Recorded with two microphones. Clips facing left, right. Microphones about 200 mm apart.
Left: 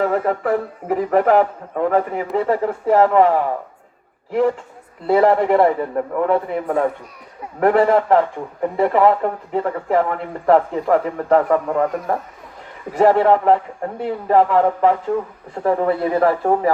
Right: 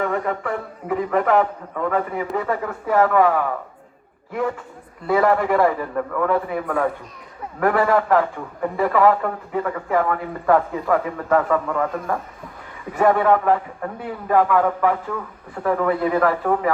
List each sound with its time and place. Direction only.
0.0 s a man's voice: 35° left (ahead or behind)
5.0 s a man's voice: 30° left (ahead or behind)